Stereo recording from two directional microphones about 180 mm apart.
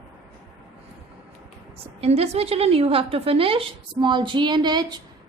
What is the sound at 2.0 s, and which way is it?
A woman's voice, 35° right (ahead or behind).